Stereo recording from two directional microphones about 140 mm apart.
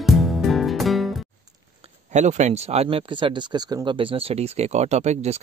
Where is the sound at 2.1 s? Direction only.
55° right (ahead or behind).